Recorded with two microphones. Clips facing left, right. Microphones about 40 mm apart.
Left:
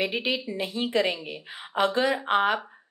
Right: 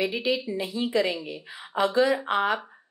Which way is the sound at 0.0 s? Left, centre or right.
Left.